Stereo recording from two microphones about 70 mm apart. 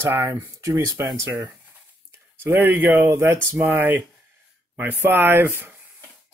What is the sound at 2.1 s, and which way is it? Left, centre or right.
Speech, right.